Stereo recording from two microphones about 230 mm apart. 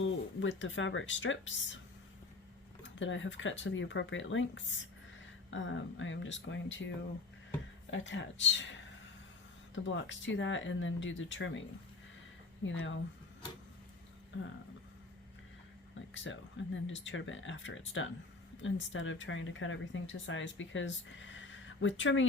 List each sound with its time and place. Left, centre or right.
0.0 s speech: left
2.8 s speech: left
9.8 s speech: left
12.6 s speech: left
16.1 s speech: left